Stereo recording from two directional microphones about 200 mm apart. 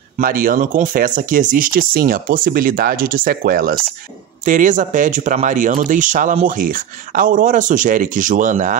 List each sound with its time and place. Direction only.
0.2 s speech: 45° right (ahead or behind)